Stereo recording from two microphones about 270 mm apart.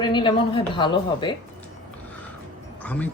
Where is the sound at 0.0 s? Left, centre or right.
Centre.